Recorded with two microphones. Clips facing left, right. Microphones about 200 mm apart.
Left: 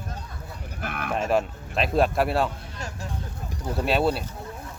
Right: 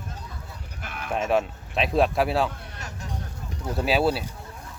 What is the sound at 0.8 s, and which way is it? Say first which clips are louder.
Livestock: left 5 dB; 60° left (ahead or behind).